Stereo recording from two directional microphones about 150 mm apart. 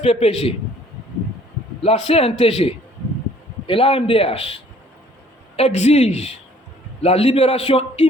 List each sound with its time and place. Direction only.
0.0 s a man's voice: 40° left (ahead or behind)
1.8 s a man's voice: 40° left (ahead or behind)